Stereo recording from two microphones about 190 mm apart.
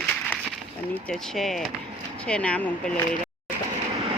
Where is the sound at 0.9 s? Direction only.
Centre (ahead or behind).